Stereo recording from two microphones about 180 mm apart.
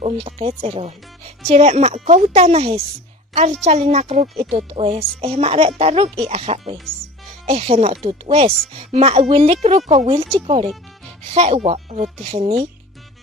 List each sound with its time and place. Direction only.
0.0 s speech: 30° right (ahead or behind)
4.6 s speech: 30° right (ahead or behind)